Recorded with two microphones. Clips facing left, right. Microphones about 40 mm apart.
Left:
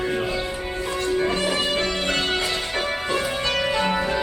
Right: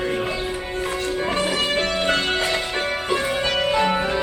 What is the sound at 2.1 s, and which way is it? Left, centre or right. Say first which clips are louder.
Music: right 2 dB; centre.